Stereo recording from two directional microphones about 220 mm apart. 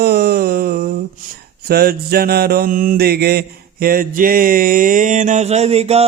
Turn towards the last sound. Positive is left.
turn(degrees=-30)  # may be behind; listen again after turning